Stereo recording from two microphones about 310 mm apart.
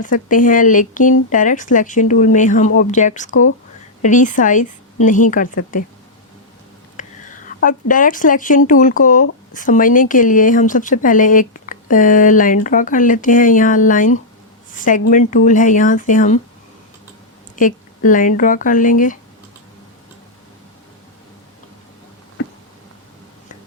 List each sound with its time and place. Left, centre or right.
0.0 s speech: left
6.9 s speech: left
17.6 s speech: left